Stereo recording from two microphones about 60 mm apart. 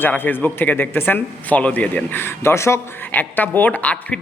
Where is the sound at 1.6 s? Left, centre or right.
Left.